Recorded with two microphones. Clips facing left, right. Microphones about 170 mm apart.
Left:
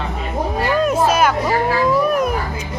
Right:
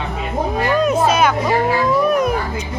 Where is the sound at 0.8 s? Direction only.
5° left (ahead or behind).